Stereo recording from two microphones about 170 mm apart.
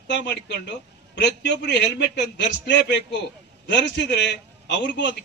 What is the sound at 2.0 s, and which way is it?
A man's voice, 90° left.